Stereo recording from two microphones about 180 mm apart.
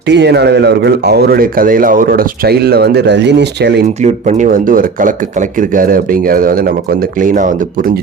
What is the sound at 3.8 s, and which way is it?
Speech, 40° right (ahead or behind).